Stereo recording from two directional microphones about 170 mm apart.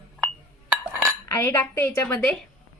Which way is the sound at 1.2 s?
15° left (ahead or behind).